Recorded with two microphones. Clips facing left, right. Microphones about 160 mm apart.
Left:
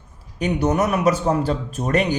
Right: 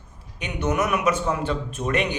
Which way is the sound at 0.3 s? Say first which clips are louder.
Left 5 dB; 40° left (ahead or behind).